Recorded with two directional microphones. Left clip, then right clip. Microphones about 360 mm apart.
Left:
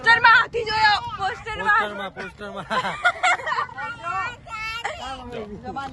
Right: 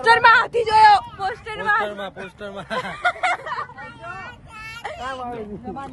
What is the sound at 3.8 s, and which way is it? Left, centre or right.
Vehicle, left.